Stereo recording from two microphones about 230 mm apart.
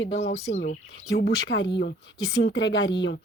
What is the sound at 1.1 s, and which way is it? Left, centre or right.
Speech, left.